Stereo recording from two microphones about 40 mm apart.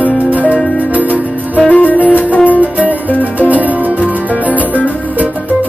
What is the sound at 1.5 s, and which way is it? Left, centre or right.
Music, left.